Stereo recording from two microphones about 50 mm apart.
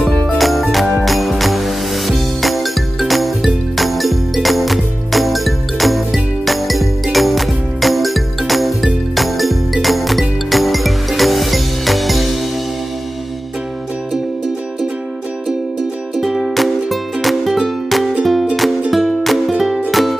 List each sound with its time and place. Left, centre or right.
0.4 s music: centre
16.2 s music: centre